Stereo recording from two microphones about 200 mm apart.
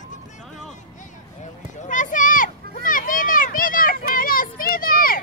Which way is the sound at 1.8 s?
40° left (ahead or behind).